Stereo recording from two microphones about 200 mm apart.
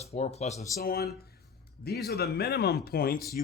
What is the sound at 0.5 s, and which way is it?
Speech, 15° left (ahead or behind).